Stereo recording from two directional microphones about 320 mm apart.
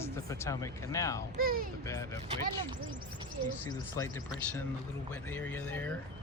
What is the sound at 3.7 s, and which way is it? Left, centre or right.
Speech, centre.